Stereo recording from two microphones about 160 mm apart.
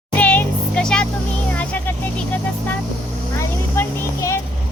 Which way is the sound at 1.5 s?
10° left (ahead or behind).